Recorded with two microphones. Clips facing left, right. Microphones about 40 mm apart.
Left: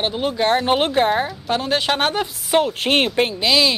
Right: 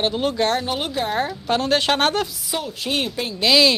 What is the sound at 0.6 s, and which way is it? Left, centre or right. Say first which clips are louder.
Speech: left 7 dB; left.